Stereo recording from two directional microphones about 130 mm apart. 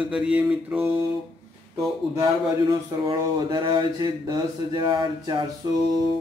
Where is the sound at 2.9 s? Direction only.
35° right (ahead or behind).